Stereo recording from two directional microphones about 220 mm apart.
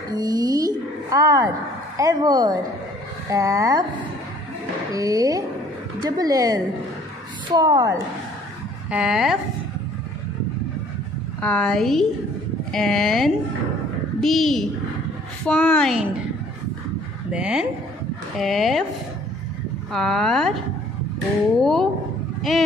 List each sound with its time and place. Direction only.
0.1 s a sound: 15° right (ahead or behind)
2.0 s speech: 15° right (ahead or behind)
4.9 s speech: 15° right (ahead or behind)
8.9 s speech: centre (ahead or behind)
11.4 s speech: 5° left (ahead or behind)
17.3 s speech: 5° right (ahead or behind)
19.9 s speech: centre (ahead or behind)
21.5 s speech: centre (ahead or behind)